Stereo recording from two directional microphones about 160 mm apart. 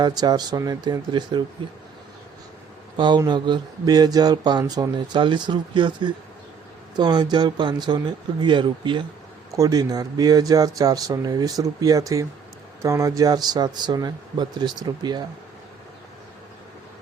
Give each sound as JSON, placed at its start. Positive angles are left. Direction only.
{"t": 0.0, "sound": "speech", "side_deg": -25}
{"t": 3.0, "sound": "speech", "side_deg": -30}